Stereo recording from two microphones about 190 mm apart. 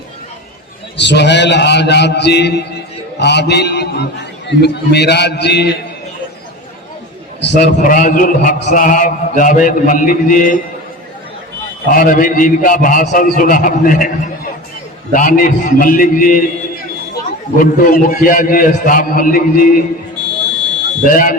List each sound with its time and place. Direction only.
0.9 s a man's voice: 65° left (ahead or behind)
7.4 s a man's voice: 65° left (ahead or behind)
7.8 s a man's voice: 45° left (ahead or behind)
11.9 s a man's voice: 45° left (ahead or behind)
15.1 s a man's voice: 45° left (ahead or behind)
17.6 s a man's voice: 50° left (ahead or behind)
21.0 s a man's voice: 45° left (ahead or behind)